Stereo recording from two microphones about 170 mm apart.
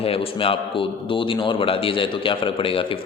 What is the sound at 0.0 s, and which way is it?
A man's voice, 35° left (ahead or behind).